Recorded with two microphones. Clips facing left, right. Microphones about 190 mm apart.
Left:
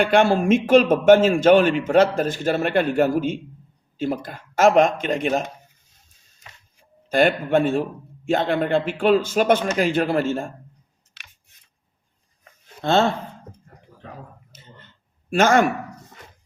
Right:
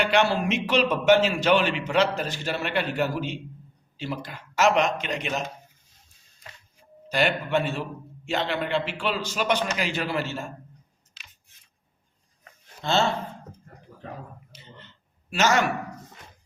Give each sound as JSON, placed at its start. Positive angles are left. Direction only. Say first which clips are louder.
{"t": 0.0, "sound": "a man's voice", "louder": "left 5 dB", "side_deg": 50}
{"t": 7.1, "sound": "a man's voice", "louder": "left 6 dB", "side_deg": 50}
{"t": 12.8, "sound": "speech", "louder": "left 5 dB", "side_deg": 55}
{"t": 14.5, "sound": "a sound", "louder": "even", "side_deg": 50}